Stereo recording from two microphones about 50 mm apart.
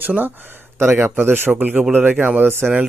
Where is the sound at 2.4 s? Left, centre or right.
Right.